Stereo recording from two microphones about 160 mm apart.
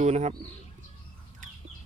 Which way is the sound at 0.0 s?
45° right (ahead or behind).